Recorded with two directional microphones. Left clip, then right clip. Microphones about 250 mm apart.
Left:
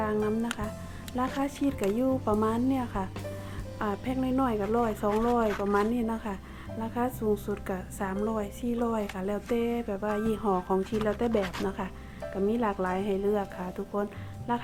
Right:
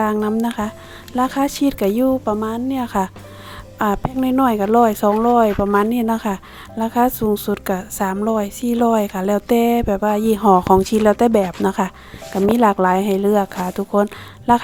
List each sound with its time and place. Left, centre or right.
0.0 s a woman's voice: right